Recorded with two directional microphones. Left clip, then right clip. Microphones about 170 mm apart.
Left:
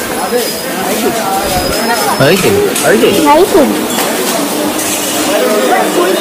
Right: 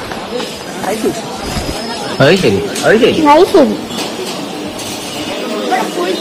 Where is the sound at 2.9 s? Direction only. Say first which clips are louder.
Right 1 dB; centre (ahead or behind).